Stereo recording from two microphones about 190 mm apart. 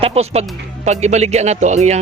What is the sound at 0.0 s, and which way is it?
Speech, 35° right (ahead or behind).